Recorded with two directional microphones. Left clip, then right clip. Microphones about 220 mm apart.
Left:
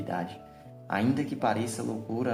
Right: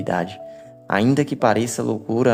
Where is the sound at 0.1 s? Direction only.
50° right (ahead or behind).